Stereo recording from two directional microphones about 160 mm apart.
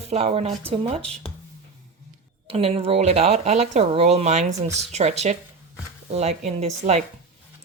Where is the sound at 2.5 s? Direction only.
35° right (ahead or behind).